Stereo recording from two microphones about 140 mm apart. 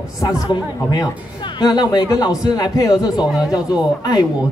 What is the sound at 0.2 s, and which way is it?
Speech, 25° left (ahead or behind).